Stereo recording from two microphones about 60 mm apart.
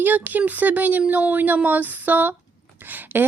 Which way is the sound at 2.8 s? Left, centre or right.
Right.